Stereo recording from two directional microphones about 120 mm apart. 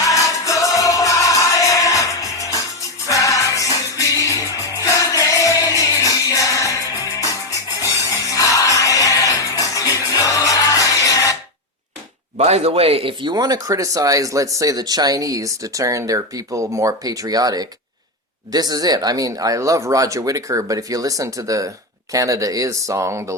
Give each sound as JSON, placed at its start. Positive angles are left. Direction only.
{"t": 0.1, "sound": "music", "side_deg": 30}
{"t": 12.4, "sound": "speech", "side_deg": -60}